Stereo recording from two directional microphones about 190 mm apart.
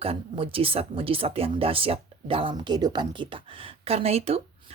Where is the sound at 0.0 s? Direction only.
30° right (ahead or behind).